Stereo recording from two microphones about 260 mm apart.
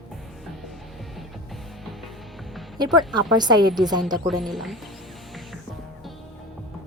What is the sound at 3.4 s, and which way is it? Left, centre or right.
Speech, centre.